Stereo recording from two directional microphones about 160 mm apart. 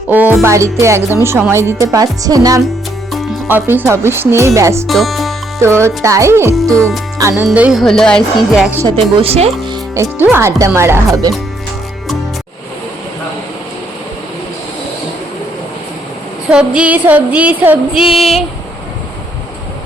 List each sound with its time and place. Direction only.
0.1 s speech: 10° right (ahead or behind)
3.5 s speech: 10° right (ahead or behind)
4.9 s speech: centre (ahead or behind)
5.5 s speech: 15° right (ahead or behind)
6.6 s speech: centre (ahead or behind)
7.2 s speech: 15° right (ahead or behind)
7.4 s speech: 5° right (ahead or behind)
9.0 s speech: 35° right (ahead or behind)
9.9 s speech: 20° right (ahead or behind)
16.5 s speech: 5° right (ahead or behind)